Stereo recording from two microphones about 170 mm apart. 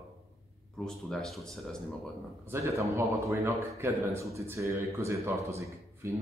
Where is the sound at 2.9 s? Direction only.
15° right (ahead or behind).